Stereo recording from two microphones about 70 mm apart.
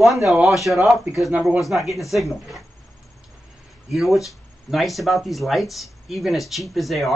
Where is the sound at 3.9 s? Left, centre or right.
Centre.